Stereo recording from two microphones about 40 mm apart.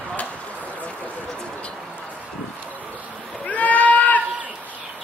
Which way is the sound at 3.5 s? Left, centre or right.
Left.